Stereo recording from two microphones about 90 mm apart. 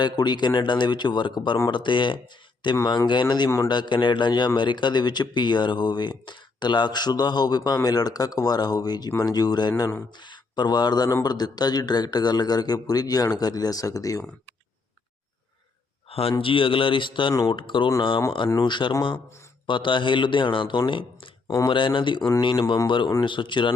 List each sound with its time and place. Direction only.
0.0 s a man's voice: 55° left (ahead or behind)
16.4 s a man's voice: 75° left (ahead or behind)
21.4 s speech: 35° left (ahead or behind)
21.7 s speech: 65° left (ahead or behind)
22.4 s a man's voice: 50° left (ahead or behind)